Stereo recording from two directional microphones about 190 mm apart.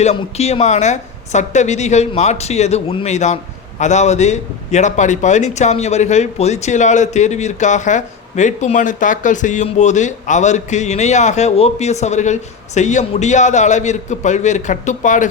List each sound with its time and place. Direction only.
0.0 s a man's voice: 35° left (ahead or behind)